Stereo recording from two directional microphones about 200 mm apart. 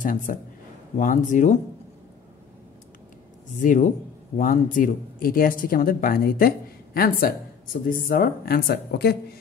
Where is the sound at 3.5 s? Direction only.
40° left (ahead or behind).